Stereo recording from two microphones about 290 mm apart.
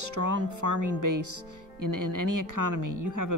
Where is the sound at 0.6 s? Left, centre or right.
Right.